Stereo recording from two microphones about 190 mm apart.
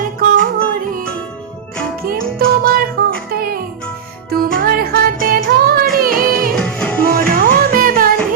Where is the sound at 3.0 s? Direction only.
55° right (ahead or behind).